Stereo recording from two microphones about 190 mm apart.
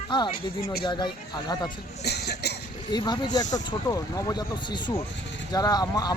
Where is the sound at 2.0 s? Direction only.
60° left (ahead or behind).